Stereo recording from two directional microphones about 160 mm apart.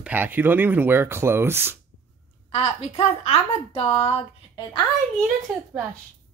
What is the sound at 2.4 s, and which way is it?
A woman's voice, 40° left (ahead or behind).